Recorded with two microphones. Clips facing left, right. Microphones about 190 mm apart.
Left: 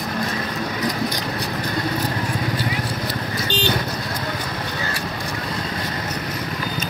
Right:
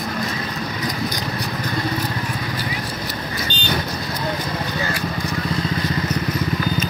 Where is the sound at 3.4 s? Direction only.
90° left.